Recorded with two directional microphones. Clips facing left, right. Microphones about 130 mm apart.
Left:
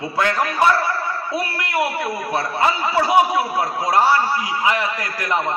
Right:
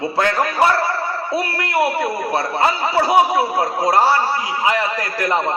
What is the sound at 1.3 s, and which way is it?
A man's voice, 30° right (ahead or behind).